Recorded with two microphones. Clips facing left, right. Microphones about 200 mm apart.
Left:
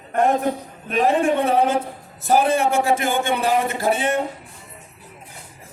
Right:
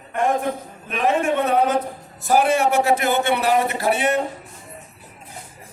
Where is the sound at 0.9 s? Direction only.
35° left (ahead or behind).